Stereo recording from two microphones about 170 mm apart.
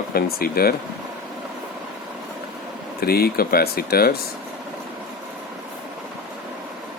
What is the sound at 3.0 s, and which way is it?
Speech, 65° left (ahead or behind).